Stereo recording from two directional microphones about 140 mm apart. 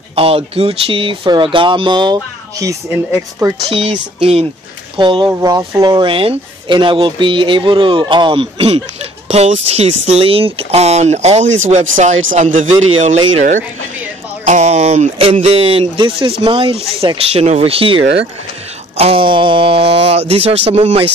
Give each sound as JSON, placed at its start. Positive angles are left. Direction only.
{"t": 0.1, "sound": "speech", "side_deg": -45}
{"t": 2.6, "sound": "speech", "side_deg": -20}
{"t": 3.6, "sound": "speech", "side_deg": -45}
{"t": 5.3, "sound": "speech", "side_deg": -20}
{"t": 14.4, "sound": "speech", "side_deg": -55}